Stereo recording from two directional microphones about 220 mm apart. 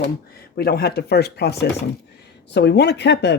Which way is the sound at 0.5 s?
45° left (ahead or behind).